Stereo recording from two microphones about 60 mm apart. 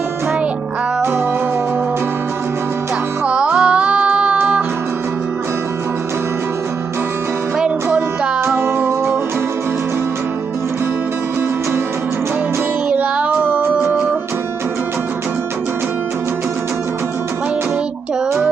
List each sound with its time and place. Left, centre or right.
3.2 s music: centre
8.5 s music: right
12.9 s child singing: right